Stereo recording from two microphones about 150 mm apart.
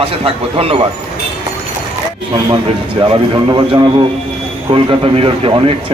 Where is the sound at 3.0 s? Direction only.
30° right (ahead or behind).